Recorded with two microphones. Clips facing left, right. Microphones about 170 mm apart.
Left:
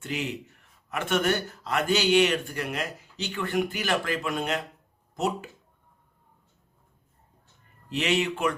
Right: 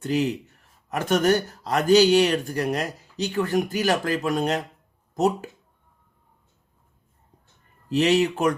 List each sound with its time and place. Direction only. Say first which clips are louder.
0.0 s speech: right 8 dB; 40° right (ahead or behind)
7.9 s speech: right 6 dB; 40° right (ahead or behind)